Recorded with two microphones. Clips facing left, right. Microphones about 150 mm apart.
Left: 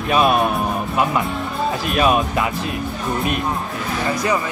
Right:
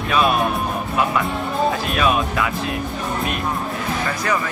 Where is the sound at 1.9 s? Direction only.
25° left (ahead or behind).